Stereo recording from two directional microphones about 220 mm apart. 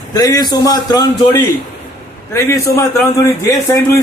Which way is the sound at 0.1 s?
15° left (ahead or behind).